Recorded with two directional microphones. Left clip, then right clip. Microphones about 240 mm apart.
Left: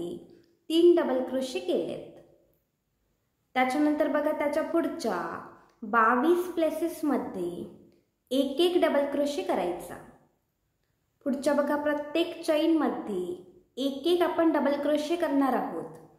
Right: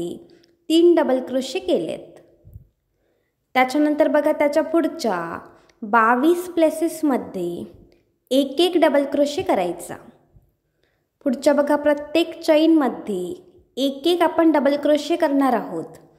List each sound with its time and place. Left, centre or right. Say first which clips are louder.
0.0 s a woman's voice: right 7 dB; right
3.5 s a woman's voice: right 8 dB; right
11.1 s a woman's voice: right 9 dB; right